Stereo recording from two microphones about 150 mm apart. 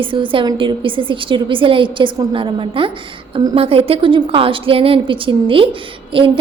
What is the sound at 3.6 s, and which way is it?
A woman's voice, 40° right (ahead or behind).